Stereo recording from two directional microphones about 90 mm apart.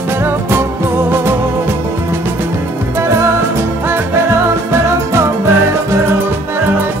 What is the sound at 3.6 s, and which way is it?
Music, 30° right (ahead or behind).